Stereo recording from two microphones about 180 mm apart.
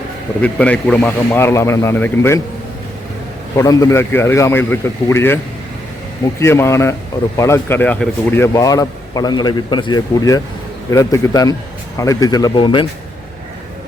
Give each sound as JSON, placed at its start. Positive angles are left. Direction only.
{"t": 0.4, "sound": "a man's voice", "side_deg": 5}
{"t": 3.5, "sound": "a man's voice", "side_deg": 20}
{"t": 6.4, "sound": "a man's voice", "side_deg": 15}